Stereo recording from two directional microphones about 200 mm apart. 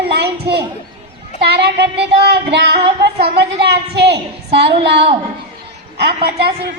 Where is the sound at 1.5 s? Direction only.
55° right (ahead or behind).